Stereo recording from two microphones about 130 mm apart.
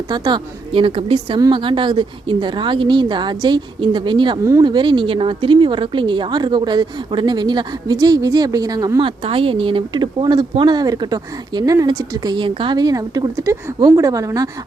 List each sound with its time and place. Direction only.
0.1 s speech: 35° right (ahead or behind)
9.0 s speech: 45° right (ahead or behind); by 14.5 s 25° right (ahead or behind)